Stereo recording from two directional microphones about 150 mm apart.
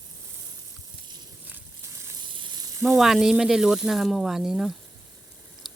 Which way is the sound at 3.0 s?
Centre (ahead or behind).